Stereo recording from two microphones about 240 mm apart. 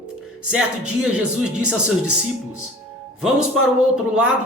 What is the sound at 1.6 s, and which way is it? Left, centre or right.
Speech, right.